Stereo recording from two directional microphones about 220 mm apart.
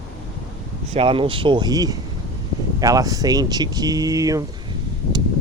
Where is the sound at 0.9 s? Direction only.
25° right (ahead or behind).